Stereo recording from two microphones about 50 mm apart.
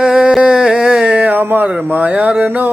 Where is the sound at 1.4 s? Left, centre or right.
Right.